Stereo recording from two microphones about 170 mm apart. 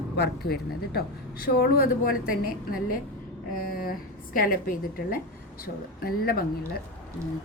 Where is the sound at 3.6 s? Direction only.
60° left (ahead or behind).